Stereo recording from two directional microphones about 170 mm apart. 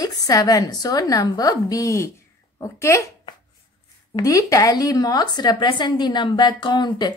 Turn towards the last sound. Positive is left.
turn(degrees=25)  # may be behind; listen again after turning